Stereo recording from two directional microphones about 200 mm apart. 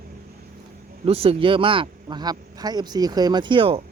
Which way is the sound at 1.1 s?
30° right (ahead or behind).